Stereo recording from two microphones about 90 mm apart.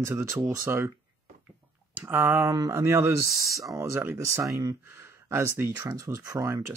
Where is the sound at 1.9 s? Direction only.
25° right (ahead or behind).